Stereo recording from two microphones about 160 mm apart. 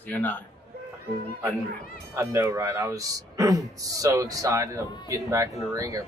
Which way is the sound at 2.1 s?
20° right (ahead or behind).